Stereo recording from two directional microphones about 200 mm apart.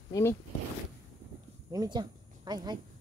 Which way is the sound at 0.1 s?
10° left (ahead or behind).